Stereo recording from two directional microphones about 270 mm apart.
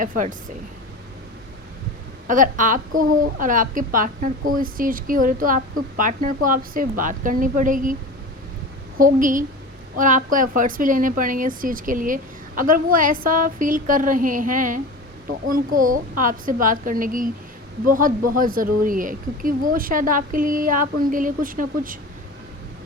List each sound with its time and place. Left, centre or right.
0.0 s a woman's voice: right
2.2 s a woman's voice: right
9.0 s a woman's voice: right